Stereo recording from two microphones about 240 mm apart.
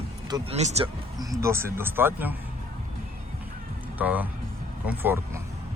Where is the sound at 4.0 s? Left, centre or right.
Centre.